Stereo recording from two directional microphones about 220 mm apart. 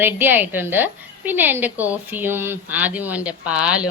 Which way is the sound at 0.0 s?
10° right (ahead or behind).